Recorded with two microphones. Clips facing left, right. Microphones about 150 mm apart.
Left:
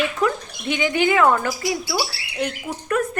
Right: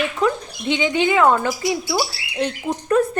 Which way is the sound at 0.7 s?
20° right (ahead or behind).